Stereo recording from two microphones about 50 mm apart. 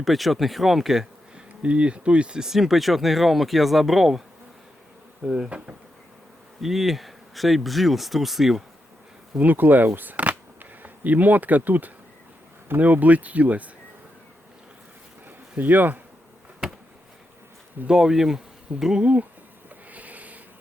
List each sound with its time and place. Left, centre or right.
0.0 s speech: centre
1.6 s speech: right
2.5 s speech: centre
5.2 s speech: centre
6.6 s speech: centre
9.4 s speech: right
15.5 s speech: right
16.6 s insect: centre
17.8 s bee: centre
19.9 s a sound: right